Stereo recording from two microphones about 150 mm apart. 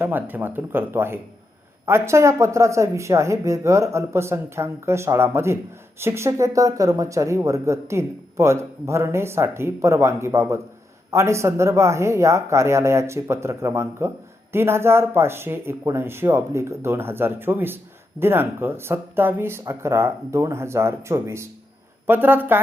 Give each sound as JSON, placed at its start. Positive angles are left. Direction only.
{"t": 0.0, "sound": "speech", "side_deg": -10}